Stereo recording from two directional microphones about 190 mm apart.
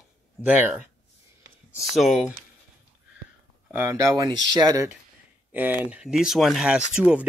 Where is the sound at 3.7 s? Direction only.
15° right (ahead or behind).